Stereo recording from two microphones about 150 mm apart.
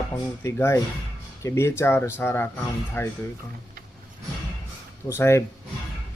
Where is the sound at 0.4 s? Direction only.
20° left (ahead or behind).